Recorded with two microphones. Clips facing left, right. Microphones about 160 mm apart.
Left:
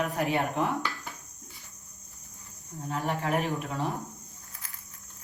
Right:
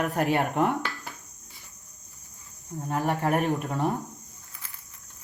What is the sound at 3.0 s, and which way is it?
Speech, 55° right (ahead or behind).